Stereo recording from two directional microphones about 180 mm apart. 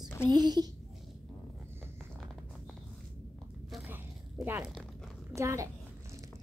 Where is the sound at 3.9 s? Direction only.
10° right (ahead or behind).